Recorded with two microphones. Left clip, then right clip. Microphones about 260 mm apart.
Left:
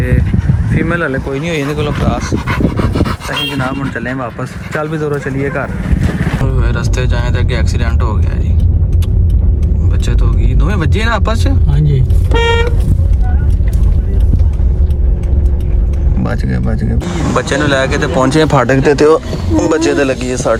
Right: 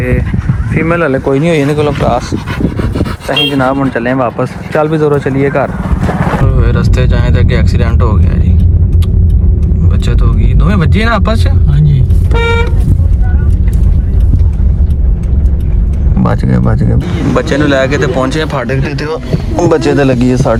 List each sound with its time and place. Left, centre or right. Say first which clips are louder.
0.0 s speech: right 3 dB; centre
10.6 s speech: right 4 dB; centre
16.2 s speech: right 6 dB; centre
17.3 s speech: right 3 dB; centre
18.3 s speech: left 4 dB; left
19.5 s speech: right 2 dB; centre